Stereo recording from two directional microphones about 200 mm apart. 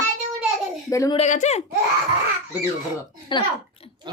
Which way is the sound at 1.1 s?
35° left (ahead or behind).